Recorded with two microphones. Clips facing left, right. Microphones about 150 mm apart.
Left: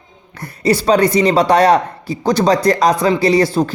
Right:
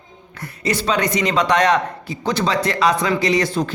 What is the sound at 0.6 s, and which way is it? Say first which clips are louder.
Speech: left 7 dB; 35° left (ahead or behind).